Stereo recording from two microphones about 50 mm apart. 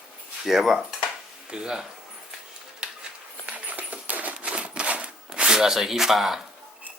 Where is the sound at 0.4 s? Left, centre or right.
Centre.